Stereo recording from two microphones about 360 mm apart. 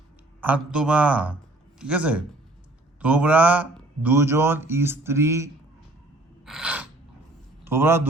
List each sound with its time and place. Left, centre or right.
0.4 s a man's voice: centre
6.4 s gasp: centre
7.6 s a man's voice: centre